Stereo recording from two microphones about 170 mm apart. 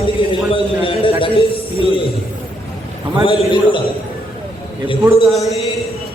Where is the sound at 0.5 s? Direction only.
30° left (ahead or behind).